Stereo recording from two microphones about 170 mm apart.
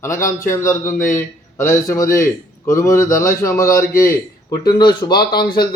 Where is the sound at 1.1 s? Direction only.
15° left (ahead or behind).